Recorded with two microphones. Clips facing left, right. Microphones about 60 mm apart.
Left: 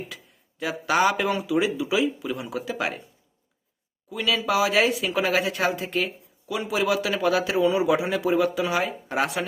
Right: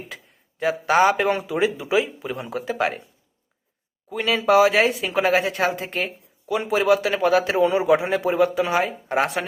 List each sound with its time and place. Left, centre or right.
0.6 s a man's voice: right
4.1 s a man's voice: right